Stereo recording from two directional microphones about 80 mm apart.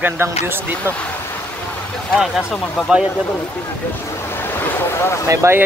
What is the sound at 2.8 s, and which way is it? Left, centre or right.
Speech, centre.